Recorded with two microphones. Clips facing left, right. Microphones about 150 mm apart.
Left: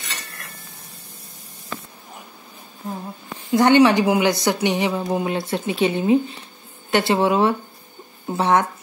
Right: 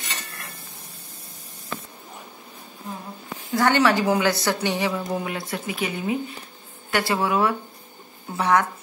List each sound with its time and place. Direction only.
3.5 s a woman's voice: 20° left (ahead or behind)